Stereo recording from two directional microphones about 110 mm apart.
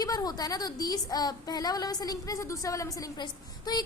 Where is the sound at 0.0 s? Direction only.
35° left (ahead or behind).